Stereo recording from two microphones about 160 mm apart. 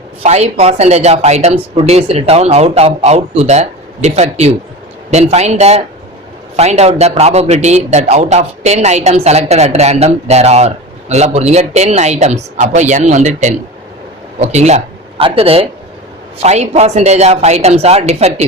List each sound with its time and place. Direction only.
0.2 s a man's voice: 45° right (ahead or behind)